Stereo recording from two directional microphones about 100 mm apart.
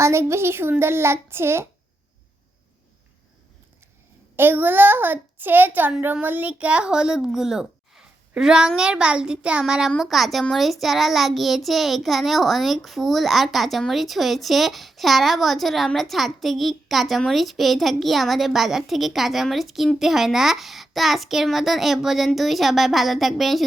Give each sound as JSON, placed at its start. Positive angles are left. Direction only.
{"t": 0.0, "sound": "a child's voice", "side_deg": -25}
{"t": 4.4, "sound": "a child's voice", "side_deg": -20}